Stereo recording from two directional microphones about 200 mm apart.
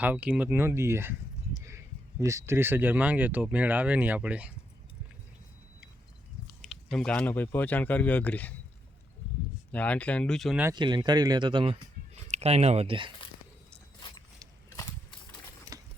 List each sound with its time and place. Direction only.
0.0 s speech: 10° right (ahead or behind)
2.2 s speech: 15° right (ahead or behind)
6.6 s speech: centre (ahead or behind)
9.7 s speech: 5° left (ahead or behind)
10.8 s speech: 20° right (ahead or behind)
15.7 s sewing machine: 15° right (ahead or behind)